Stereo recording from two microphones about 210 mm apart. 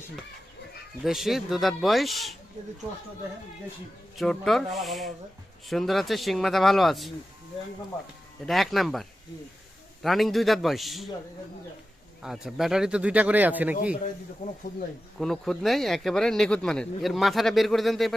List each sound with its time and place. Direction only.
1.0 s speech: centre (ahead or behind)
4.2 s speech: centre (ahead or behind)
8.4 s speech: centre (ahead or behind)
12.2 s speech: centre (ahead or behind)
14.4 s speech: 40° left (ahead or behind)
15.2 s speech: centre (ahead or behind)